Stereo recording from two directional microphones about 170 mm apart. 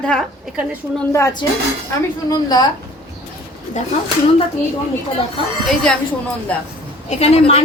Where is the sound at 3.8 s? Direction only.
45° left (ahead or behind).